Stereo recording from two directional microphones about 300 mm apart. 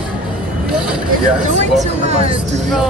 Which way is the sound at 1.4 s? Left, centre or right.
Right.